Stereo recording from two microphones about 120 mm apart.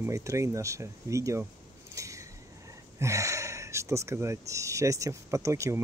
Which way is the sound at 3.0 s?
25° right (ahead or behind).